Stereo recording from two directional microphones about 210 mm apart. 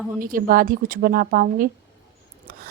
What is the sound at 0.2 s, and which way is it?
A woman's voice, 40° right (ahead or behind).